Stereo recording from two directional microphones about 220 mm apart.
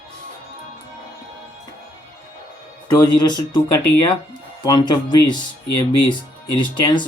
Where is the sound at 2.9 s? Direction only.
20° left (ahead or behind).